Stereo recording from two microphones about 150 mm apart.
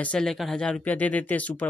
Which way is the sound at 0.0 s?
5° left (ahead or behind).